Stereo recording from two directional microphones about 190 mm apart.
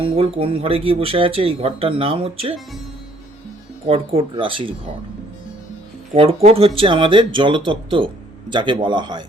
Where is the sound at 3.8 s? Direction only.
30° right (ahead or behind).